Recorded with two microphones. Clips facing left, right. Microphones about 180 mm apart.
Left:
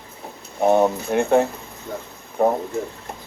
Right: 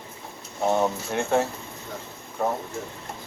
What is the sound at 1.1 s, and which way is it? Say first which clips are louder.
Speech: left 7 dB; 60° left (ahead or behind).